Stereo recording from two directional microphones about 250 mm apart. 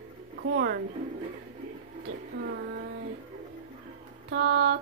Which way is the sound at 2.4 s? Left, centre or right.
Right.